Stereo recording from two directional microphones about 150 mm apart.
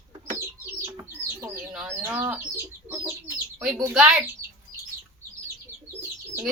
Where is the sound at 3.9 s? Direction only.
5° right (ahead or behind).